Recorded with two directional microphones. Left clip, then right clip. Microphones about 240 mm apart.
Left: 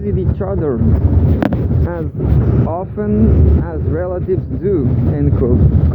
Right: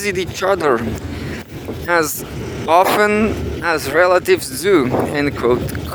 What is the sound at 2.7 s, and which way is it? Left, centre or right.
Speech, right.